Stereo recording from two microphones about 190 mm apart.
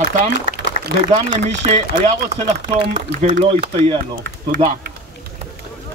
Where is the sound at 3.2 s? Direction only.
40° right (ahead or behind).